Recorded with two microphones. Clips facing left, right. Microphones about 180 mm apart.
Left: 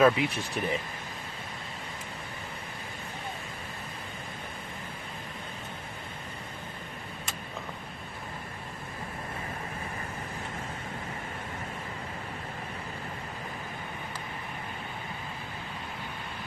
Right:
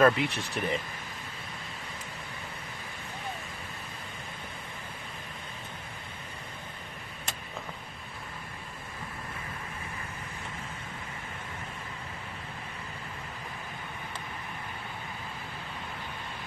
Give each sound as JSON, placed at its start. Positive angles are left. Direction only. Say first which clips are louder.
{"t": 0.0, "sound": "speech", "louder": "left 1 dB", "side_deg": 5}